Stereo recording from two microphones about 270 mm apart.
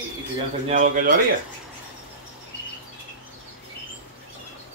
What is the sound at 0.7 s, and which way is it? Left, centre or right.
Speech, right.